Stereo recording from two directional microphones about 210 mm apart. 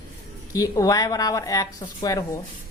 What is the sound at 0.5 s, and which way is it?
Speech, 15° left (ahead or behind).